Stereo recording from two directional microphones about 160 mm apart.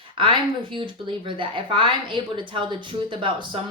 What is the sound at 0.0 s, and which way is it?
Speech, 30° right (ahead or behind).